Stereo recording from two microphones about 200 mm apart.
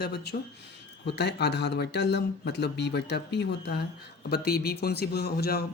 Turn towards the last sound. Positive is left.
turn(degrees=50)  # may be behind; listen again after turning